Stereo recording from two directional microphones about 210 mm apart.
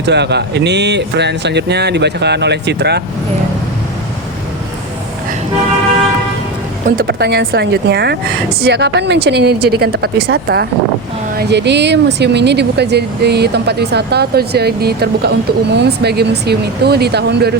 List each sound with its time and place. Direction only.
0.0 s speech: 55° right (ahead or behind)
6.8 s speech: 45° right (ahead or behind)